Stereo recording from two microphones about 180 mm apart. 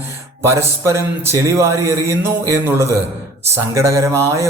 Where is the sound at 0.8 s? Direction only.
15° right (ahead or behind).